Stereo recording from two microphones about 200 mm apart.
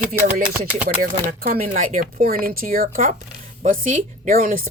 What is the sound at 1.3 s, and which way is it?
Speech, 45° right (ahead or behind).